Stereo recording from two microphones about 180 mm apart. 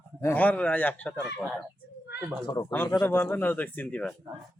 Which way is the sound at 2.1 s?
70° left (ahead or behind).